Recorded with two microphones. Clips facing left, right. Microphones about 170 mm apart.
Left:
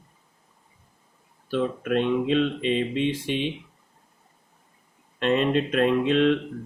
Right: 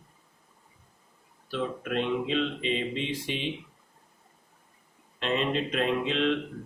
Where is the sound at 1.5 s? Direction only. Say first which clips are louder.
Left 6 dB; 50° left (ahead or behind).